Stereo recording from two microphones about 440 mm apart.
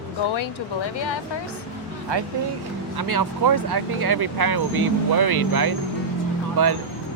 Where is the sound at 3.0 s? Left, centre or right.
Right.